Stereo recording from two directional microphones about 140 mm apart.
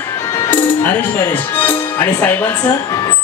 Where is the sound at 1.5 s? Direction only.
15° left (ahead or behind).